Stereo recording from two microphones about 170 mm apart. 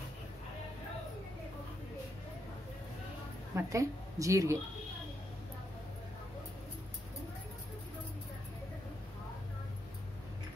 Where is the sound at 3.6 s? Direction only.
20° right (ahead or behind).